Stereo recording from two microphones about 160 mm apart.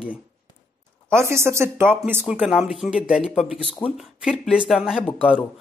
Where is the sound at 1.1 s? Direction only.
15° right (ahead or behind); by 5.4 s centre (ahead or behind).